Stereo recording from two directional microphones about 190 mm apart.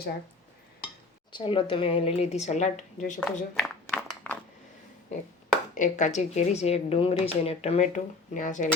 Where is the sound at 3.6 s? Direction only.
5° left (ahead or behind).